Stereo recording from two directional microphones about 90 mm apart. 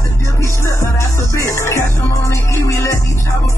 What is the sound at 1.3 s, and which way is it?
Music, 30° left (ahead or behind).